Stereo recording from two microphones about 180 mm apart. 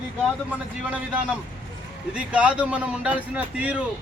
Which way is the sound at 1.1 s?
5° right (ahead or behind).